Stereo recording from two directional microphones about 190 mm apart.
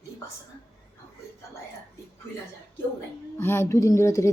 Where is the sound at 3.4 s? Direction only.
10° left (ahead or behind).